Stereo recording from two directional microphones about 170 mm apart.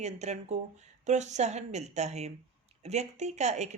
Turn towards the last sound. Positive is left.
turn(degrees=-40)  # may be behind; listen again after turning